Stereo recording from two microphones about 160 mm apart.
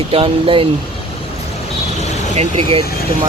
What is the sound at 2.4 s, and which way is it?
Speech, 40° right (ahead or behind).